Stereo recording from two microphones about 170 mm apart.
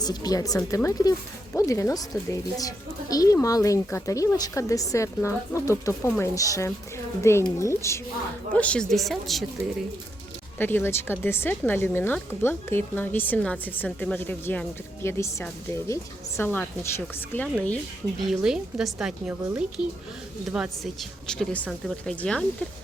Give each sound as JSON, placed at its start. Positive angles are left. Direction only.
{"t": 0.0, "sound": "speech", "side_deg": 20}
{"t": 10.6, "sound": "speech", "side_deg": 15}
{"t": 18.3, "sound": "speech", "side_deg": -5}